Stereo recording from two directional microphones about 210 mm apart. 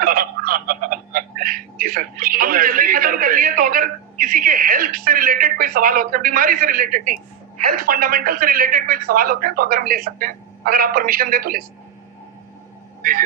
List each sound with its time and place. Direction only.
0.0 s speech: 40° right (ahead or behind)
13.0 s speech: 45° right (ahead or behind)